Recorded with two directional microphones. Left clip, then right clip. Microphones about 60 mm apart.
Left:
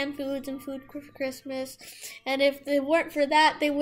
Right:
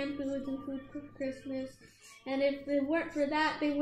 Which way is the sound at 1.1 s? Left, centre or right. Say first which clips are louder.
Left 6 dB; left.